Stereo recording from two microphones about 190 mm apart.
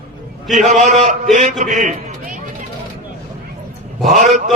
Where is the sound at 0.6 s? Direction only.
40° right (ahead or behind).